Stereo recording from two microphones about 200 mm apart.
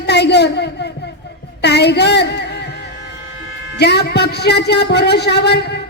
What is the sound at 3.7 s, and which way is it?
A woman's voice, 55° left (ahead or behind).